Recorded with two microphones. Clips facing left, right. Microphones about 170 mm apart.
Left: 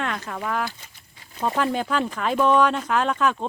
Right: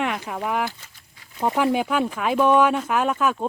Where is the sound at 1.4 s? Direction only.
15° right (ahead or behind).